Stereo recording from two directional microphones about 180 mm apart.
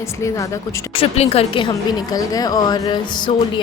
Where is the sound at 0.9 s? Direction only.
30° left (ahead or behind).